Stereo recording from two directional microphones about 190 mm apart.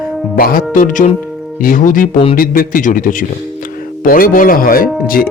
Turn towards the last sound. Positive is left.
turn(degrees=50)  # may be behind; listen again after turning